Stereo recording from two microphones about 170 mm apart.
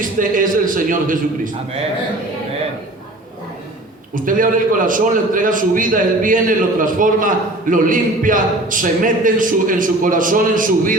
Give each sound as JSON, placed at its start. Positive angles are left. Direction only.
{"t": 0.0, "sound": "a man's voice", "side_deg": -50}
{"t": 4.1, "sound": "a man's voice", "side_deg": -50}